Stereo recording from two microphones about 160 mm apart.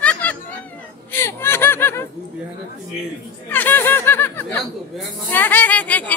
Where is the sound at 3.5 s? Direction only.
10° left (ahead or behind).